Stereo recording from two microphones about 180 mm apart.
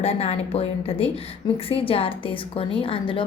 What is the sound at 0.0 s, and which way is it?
A woman's voice, 35° left (ahead or behind).